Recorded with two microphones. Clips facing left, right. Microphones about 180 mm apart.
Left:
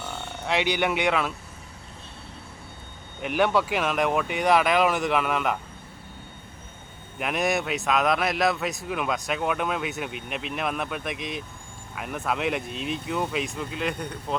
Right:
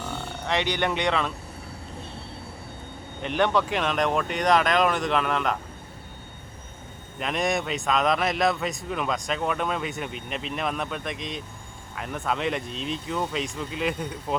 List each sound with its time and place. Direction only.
0.4 s speech: 10° left (ahead or behind)
3.2 s speech: 10° left (ahead or behind)
7.2 s a man's voice: 5° left (ahead or behind)